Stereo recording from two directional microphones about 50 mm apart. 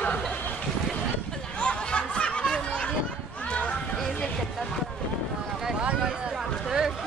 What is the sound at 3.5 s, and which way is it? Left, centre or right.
Children playing, left.